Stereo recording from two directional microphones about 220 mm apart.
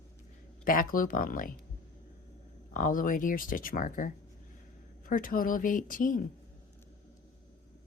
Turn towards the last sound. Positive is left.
turn(degrees=40)  # may be behind; listen again after turning